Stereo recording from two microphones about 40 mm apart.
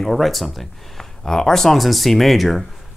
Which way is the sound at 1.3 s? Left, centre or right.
Centre.